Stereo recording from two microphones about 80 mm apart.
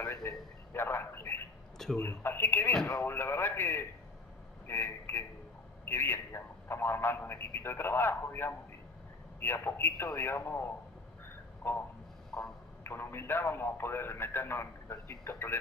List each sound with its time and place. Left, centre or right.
0.0 s a man's voice: left
12.8 s a man's voice: left